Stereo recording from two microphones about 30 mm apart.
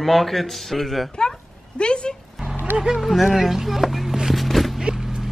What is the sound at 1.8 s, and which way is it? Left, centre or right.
Dog, left.